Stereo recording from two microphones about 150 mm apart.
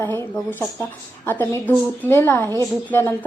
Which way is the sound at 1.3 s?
15° left (ahead or behind).